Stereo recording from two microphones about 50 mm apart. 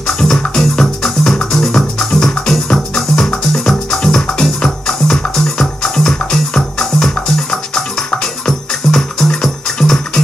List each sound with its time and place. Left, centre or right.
0.0 s music: centre
8.5 s music: centre